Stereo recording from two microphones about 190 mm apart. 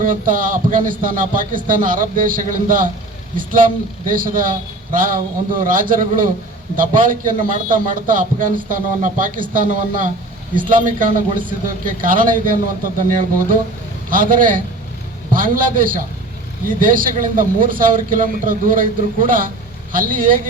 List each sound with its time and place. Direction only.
0.0 s a man's voice: 45° right (ahead or behind)